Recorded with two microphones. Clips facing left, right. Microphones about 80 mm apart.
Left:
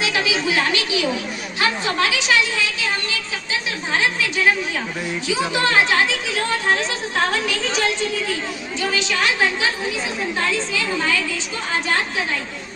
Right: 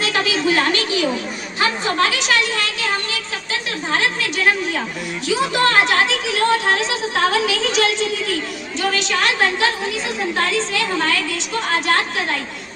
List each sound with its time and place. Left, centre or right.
0.0 s a woman's voice: right
5.5 s a woman's voice: right
8.8 s a woman's voice: right